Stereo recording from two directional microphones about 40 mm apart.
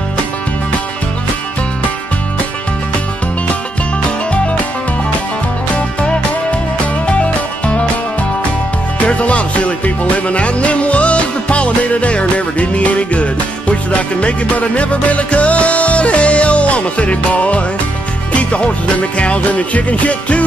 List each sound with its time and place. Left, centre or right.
7.1 s music: left
9.0 s music: left